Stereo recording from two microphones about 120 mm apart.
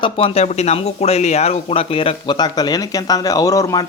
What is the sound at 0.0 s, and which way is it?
Speech, 50° left (ahead or behind).